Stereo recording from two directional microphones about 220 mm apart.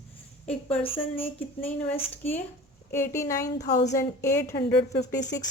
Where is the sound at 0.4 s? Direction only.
5° left (ahead or behind).